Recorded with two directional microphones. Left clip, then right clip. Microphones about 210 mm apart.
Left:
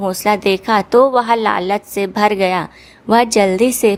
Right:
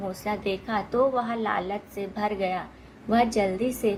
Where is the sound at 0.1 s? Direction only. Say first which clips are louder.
Left 16 dB; 45° left (ahead or behind).